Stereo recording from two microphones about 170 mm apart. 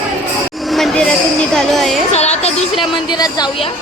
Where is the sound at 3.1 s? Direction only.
25° left (ahead or behind).